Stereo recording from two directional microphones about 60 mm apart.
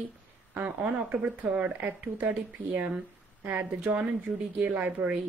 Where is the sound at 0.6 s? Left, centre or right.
Right.